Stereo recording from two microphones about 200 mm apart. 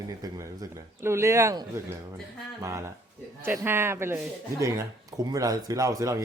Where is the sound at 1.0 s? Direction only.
15° right (ahead or behind).